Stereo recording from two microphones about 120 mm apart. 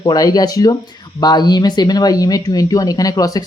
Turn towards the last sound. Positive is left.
turn(degrees=30)  # may be behind; listen again after turning